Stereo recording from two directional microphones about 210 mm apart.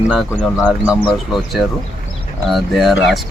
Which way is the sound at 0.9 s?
25° left (ahead or behind).